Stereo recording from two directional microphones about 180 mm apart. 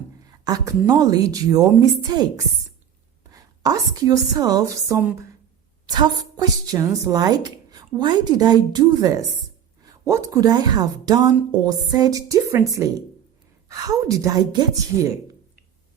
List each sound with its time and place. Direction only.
0.3 s a woman's voice: 20° right (ahead or behind)